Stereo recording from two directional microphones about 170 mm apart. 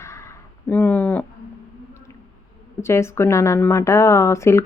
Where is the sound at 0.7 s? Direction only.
10° left (ahead or behind).